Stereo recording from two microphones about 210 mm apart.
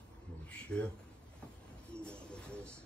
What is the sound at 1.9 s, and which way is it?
Music, 5° left (ahead or behind).